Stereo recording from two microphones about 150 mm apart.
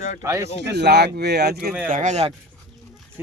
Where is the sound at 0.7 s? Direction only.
90° right.